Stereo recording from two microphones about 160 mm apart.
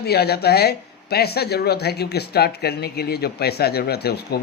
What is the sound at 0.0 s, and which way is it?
Speech, 85° left.